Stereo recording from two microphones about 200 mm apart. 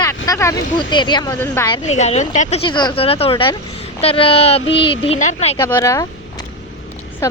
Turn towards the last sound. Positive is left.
turn(degrees=15)  # may be behind; listen again after turning